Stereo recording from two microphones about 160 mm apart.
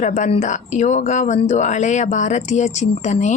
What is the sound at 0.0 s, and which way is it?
A woman's voice, 45° left (ahead or behind).